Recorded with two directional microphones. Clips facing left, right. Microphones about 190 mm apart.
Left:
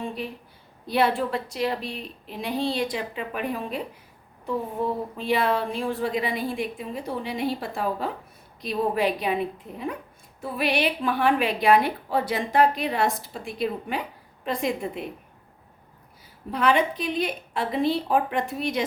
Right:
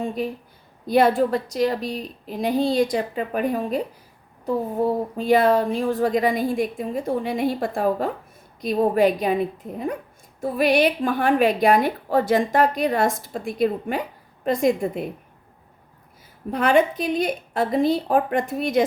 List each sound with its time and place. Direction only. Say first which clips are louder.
0.9 s a woman's voice: right 6 dB; 45° right (ahead or behind)
5.1 s a woman's voice: right 7 dB; 45° right (ahead or behind)
16.5 s a woman's voice: right 4 dB; 45° right (ahead or behind)